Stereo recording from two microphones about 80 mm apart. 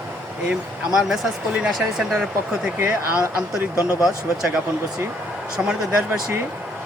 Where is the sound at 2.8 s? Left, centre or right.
Right.